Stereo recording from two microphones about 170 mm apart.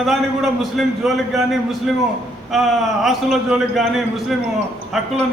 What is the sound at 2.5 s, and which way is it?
A man's voice, centre (ahead or behind).